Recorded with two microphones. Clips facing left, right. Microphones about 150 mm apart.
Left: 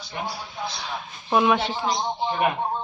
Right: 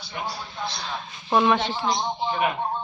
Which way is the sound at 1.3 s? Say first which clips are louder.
Even; 5° left (ahead or behind).